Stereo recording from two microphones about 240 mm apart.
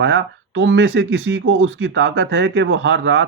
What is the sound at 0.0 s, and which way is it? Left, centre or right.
Speech, right.